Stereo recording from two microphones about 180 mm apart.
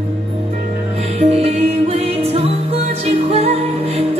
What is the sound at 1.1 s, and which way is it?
Music, 35° right (ahead or behind).